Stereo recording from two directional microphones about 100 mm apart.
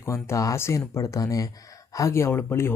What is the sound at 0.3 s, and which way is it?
Speech, 30° left (ahead or behind).